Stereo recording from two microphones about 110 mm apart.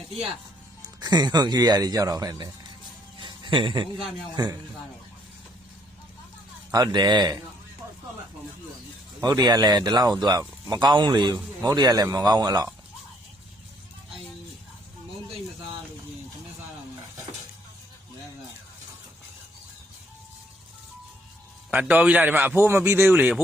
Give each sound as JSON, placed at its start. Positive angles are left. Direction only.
{"t": 0.9, "sound": "speech", "side_deg": -40}
{"t": 3.2, "sound": "music", "side_deg": -45}
{"t": 4.4, "sound": "speech", "side_deg": -40}
{"t": 6.7, "sound": "speech", "side_deg": -35}
{"t": 9.2, "sound": "speech", "side_deg": -40}
{"t": 21.7, "sound": "a man's voice", "side_deg": -15}